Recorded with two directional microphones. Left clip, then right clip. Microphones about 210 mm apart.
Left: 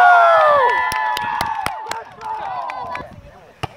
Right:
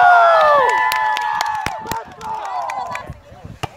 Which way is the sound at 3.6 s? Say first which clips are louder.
Even; 5° right (ahead or behind).